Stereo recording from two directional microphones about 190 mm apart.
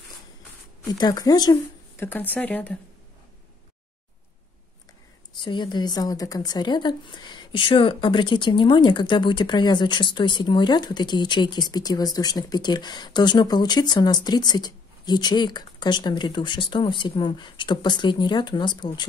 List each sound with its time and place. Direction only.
0.9 s speech: 20° left (ahead or behind)
5.3 s speech: 25° left (ahead or behind)